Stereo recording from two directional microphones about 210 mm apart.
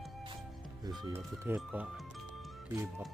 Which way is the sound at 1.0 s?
15° right (ahead or behind).